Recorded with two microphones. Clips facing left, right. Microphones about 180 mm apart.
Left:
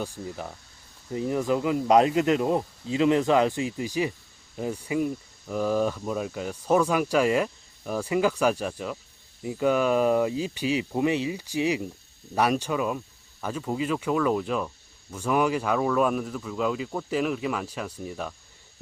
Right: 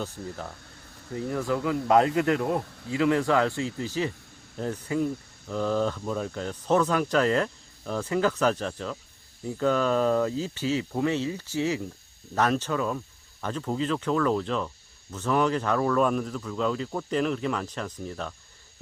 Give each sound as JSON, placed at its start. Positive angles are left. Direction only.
{"t": 0.0, "sound": "speech", "side_deg": 15}